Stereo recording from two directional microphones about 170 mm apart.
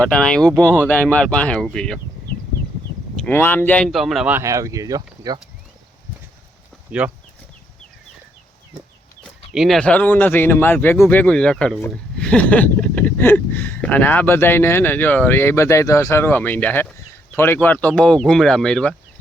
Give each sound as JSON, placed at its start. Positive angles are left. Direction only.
{"t": 0.0, "sound": "speech", "side_deg": 5}
{"t": 3.2, "sound": "speech", "side_deg": 10}
{"t": 4.4, "sound": "speech", "side_deg": -20}
{"t": 7.0, "sound": "speech", "side_deg": -10}
{"t": 9.5, "sound": "speech", "side_deg": 0}